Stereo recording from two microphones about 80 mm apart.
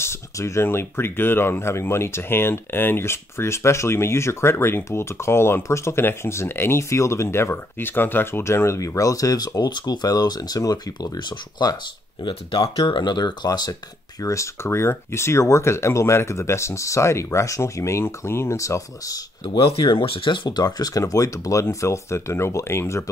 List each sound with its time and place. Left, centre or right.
0.0 s speech: left
12.3 s speech: left
14.2 s speech: left
19.4 s speech: left